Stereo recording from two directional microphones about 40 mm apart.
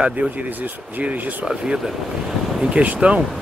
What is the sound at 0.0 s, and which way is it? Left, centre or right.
Speech, right.